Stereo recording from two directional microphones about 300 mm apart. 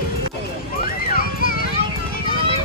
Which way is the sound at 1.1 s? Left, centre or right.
Left.